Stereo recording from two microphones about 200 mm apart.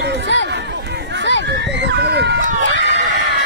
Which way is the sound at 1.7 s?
60° right (ahead or behind).